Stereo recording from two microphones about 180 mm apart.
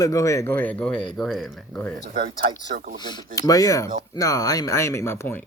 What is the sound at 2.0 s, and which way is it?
Speech, 55° right (ahead or behind).